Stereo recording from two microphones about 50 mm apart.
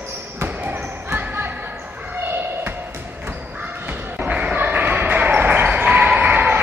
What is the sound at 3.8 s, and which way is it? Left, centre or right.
Slam, right.